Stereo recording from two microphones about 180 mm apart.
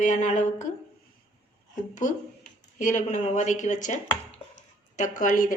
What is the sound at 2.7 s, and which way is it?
Speech, 40° left (ahead or behind).